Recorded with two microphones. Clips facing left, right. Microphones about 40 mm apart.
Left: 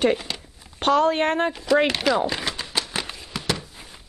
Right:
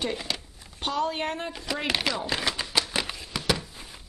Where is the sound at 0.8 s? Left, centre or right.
Left.